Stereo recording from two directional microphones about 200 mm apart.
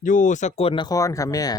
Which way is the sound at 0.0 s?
40° left (ahead or behind).